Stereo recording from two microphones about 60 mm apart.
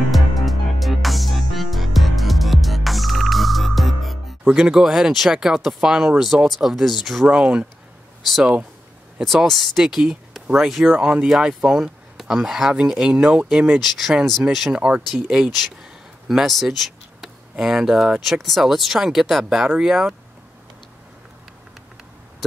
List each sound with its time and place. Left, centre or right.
0.1 s music: centre
4.5 s speech: centre
7.2 s speech: centre
9.2 s speech: centre
11.0 s speech: centre
13.7 s speech: centre
14.7 s speech: centre
15.8 s a sound: centre
18.2 s speech: centre